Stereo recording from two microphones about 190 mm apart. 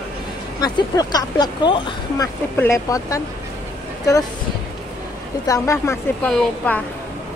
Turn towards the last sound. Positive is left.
turn(degrees=5)  # may be behind; listen again after turning